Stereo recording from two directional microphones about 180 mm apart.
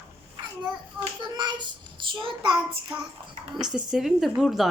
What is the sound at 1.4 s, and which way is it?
Child singing, 25° right (ahead or behind).